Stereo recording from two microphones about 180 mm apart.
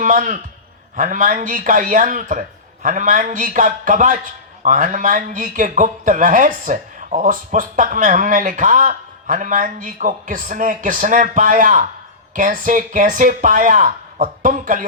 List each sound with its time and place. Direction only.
0.0 s a man's voice: 45° right (ahead or behind)